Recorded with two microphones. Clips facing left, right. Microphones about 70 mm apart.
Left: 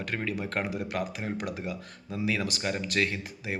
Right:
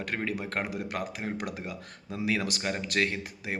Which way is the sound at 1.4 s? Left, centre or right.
Right.